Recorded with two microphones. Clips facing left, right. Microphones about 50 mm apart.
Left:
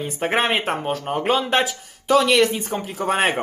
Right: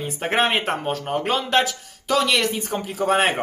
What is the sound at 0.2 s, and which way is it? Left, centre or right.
Speech, centre.